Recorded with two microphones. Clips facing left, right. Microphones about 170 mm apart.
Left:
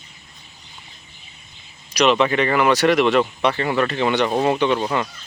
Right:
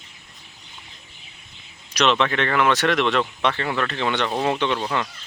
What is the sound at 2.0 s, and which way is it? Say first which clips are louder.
Speech: left 4 dB; 5° left (ahead or behind).